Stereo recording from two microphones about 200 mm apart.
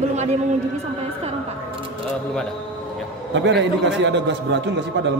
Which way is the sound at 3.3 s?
65° right (ahead or behind).